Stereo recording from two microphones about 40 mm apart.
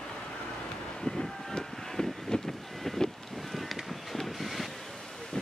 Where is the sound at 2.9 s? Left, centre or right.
Centre.